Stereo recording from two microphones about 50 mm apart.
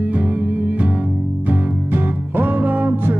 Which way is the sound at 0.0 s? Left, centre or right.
Right.